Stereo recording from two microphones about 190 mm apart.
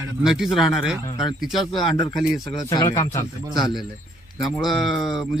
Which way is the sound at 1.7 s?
25° left (ahead or behind).